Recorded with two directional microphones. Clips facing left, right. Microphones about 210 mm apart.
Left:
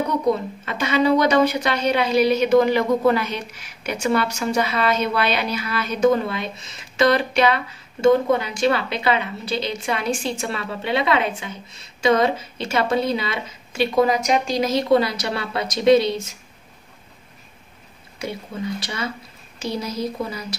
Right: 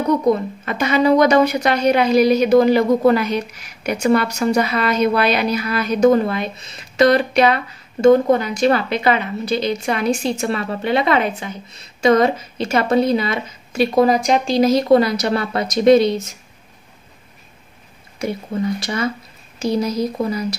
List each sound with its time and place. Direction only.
0.7 s a woman's voice: 45° right (ahead or behind)
18.8 s speech: 45° right (ahead or behind)